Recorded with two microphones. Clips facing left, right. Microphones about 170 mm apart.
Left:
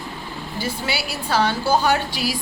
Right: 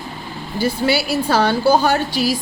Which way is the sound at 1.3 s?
35° right (ahead or behind).